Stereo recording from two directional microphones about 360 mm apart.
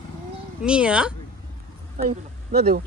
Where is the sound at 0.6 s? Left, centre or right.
Centre.